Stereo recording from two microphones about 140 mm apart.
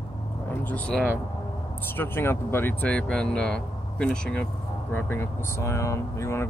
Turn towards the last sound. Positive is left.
turn(degrees=20)  # may be behind; listen again after turning